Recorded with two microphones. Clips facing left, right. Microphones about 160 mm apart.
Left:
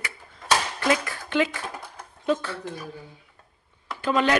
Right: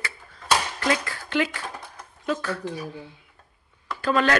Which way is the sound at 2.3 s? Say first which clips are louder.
Left 2 dB; 25° left (ahead or behind).